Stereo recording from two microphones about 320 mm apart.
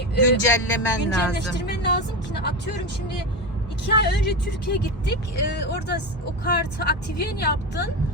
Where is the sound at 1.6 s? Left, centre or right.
Left.